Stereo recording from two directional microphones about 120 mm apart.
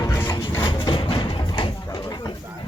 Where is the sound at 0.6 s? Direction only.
35° left (ahead or behind).